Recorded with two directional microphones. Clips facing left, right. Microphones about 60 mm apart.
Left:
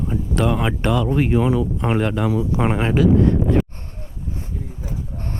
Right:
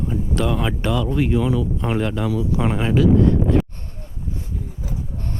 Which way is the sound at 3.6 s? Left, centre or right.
Left.